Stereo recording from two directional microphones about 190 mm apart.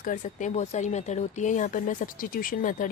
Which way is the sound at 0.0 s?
40° left (ahead or behind).